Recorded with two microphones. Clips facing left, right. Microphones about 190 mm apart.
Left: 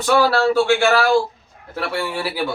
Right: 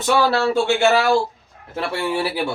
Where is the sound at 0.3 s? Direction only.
20° right (ahead or behind).